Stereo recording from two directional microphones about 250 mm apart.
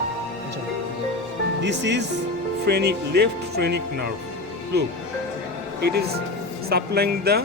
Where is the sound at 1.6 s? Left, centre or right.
Right.